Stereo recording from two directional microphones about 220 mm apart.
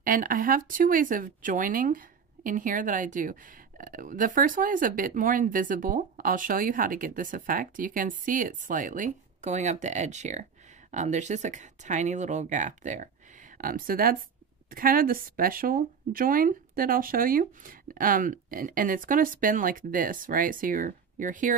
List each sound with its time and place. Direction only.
0.0 s speech: 40° right (ahead or behind)